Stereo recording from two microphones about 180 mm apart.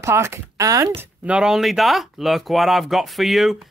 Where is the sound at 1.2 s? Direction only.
5° right (ahead or behind).